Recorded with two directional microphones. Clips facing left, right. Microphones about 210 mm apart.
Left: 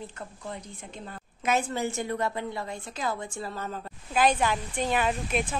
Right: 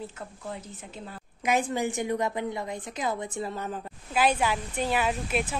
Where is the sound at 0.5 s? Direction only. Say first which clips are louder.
Right 1 dB; 5° right (ahead or behind).